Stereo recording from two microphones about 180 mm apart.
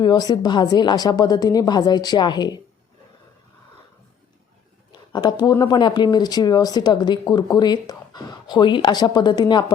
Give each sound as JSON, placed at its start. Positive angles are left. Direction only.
{"t": 0.0, "sound": "speech", "side_deg": 20}
{"t": 4.9, "sound": "speech", "side_deg": 25}